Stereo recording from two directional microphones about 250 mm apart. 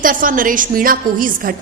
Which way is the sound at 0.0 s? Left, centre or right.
Right.